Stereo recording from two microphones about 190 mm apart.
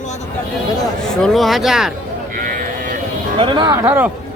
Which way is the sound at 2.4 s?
45° right (ahead or behind).